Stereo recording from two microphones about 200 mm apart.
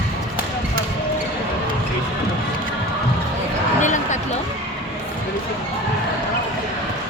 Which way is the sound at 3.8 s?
40° left (ahead or behind).